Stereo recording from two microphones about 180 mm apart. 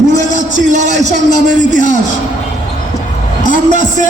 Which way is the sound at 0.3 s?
40° right (ahead or behind).